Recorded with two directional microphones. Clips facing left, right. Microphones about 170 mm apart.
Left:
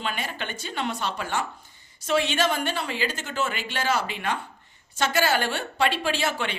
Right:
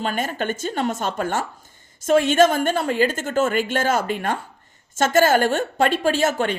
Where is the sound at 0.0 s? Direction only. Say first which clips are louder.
Right 7 dB; 45° right (ahead or behind).